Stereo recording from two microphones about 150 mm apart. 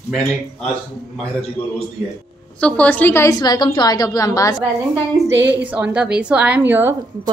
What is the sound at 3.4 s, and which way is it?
A woman's voice, 30° left (ahead or behind).